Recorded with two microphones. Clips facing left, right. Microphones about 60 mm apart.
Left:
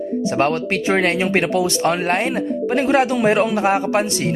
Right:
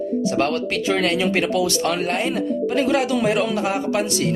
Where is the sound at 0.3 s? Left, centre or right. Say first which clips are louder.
Left 6 dB; left.